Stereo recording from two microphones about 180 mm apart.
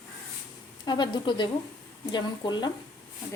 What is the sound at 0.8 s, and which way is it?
Speech, 25° left (ahead or behind).